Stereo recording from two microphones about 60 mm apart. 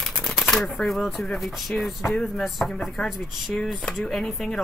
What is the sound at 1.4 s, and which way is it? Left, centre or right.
Speech, centre.